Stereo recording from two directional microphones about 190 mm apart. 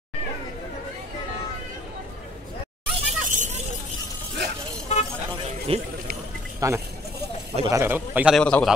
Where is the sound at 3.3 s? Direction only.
40° right (ahead or behind).